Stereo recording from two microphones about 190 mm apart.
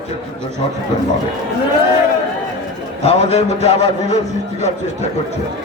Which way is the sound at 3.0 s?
35° left (ahead or behind).